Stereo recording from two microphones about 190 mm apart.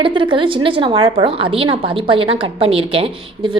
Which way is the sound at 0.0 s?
25° right (ahead or behind).